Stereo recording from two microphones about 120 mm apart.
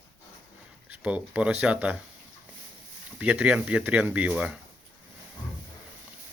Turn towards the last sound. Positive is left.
turn(degrees=-10)  # may be behind; listen again after turning